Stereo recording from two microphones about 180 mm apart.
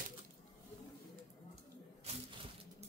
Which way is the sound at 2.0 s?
35° right (ahead or behind).